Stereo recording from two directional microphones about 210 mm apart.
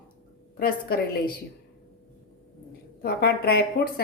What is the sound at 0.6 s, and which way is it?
Speech, 45° left (ahead or behind).